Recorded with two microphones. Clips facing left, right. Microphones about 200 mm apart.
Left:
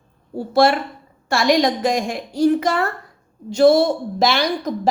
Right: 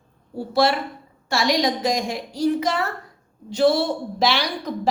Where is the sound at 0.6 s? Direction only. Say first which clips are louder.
Left 4 dB; 50° left (ahead or behind).